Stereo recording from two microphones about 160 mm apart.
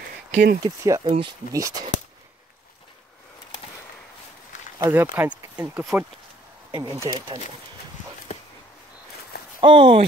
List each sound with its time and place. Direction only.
0.3 s speech: 55° right (ahead or behind)
0.6 s speech: 25° right (ahead or behind)
4.7 s speech: 15° right (ahead or behind)
6.8 s speech: 25° right (ahead or behind)
8.3 s a sound: 55° left (ahead or behind)
9.6 s speech: 35° right (ahead or behind)